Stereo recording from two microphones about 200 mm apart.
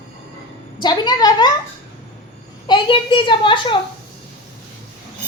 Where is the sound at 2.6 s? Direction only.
25° left (ahead or behind).